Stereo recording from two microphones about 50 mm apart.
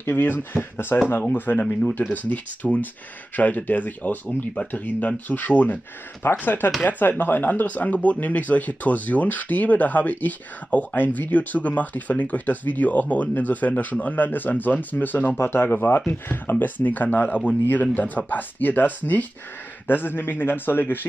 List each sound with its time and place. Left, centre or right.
0.0 s a man's voice: left
1.3 s speech: left
2.2 s speech: left
15.3 s a man's voice: left